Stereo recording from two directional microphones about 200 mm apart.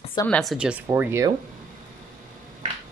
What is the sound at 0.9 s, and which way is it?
Speech, 15° right (ahead or behind).